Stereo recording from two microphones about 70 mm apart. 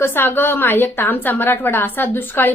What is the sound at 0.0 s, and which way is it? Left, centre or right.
A woman's voice, left.